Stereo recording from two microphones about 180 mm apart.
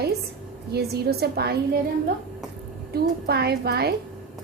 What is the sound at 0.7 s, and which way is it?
Speech, 60° right (ahead or behind).